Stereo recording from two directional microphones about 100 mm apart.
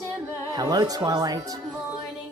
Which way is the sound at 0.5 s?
40° right (ahead or behind).